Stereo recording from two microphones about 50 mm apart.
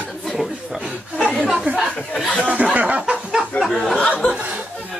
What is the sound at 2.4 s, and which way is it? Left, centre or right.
Speech, right.